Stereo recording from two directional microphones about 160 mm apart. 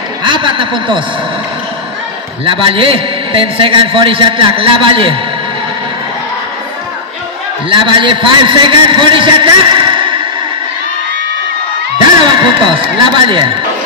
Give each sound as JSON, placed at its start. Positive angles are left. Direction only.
{"t": 0.2, "sound": "a man's voice", "side_deg": -30}
{"t": 2.4, "sound": "a man's voice", "side_deg": -35}
{"t": 7.7, "sound": "a man's voice", "side_deg": -30}
{"t": 12.2, "sound": "a man's voice", "side_deg": -30}